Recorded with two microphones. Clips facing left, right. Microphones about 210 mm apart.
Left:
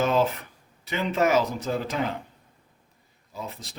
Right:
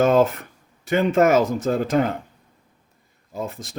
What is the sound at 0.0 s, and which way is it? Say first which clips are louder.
Speech: right 6 dB; 50° right (ahead or behind).